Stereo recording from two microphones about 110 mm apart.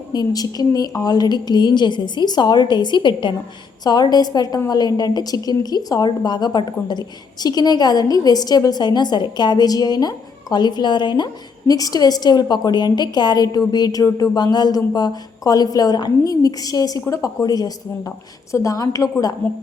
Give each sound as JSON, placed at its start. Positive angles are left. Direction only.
{"t": 0.1, "sound": "a woman's voice", "side_deg": 35}